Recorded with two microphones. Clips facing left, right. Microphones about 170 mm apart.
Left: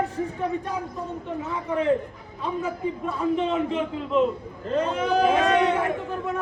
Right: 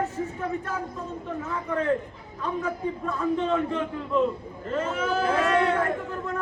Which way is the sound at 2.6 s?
10° left (ahead or behind).